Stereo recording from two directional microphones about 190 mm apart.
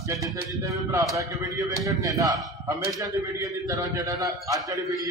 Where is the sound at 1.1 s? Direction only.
20° right (ahead or behind).